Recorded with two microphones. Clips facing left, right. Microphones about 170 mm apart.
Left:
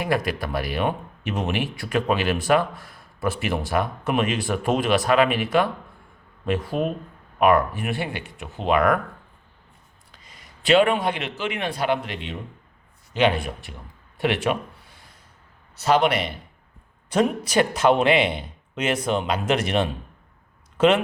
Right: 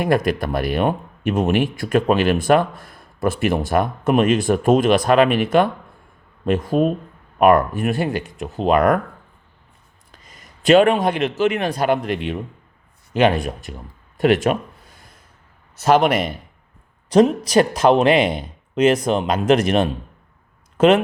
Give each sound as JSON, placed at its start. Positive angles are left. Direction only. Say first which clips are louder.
{"t": 0.0, "sound": "speech", "louder": "right 6 dB", "side_deg": -50}
{"t": 10.1, "sound": "a man's voice", "louder": "right 3 dB", "side_deg": -45}
{"t": 15.7, "sound": "speech", "louder": "right 4 dB", "side_deg": -50}